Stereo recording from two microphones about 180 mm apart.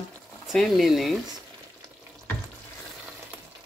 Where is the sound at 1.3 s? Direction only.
20° right (ahead or behind).